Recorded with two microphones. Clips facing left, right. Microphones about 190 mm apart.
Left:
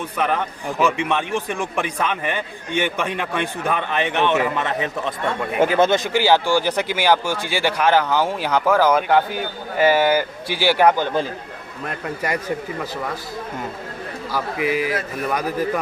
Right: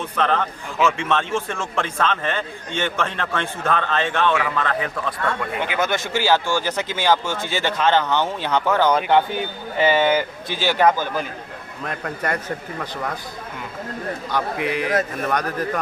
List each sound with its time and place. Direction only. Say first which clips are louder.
0.2 s a man's voice: right 1 dB; 10° left (ahead or behind)
5.5 s speech: left 11 dB; 35° left (ahead or behind)
5.9 s speech: left 3 dB; 15° left (ahead or behind)
11.9 s speech: left 1 dB; 5° left (ahead or behind)
14.3 s a man's voice: left 2 dB; 5° left (ahead or behind)